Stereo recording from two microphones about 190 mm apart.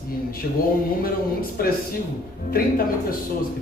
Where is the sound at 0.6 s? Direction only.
50° left (ahead or behind).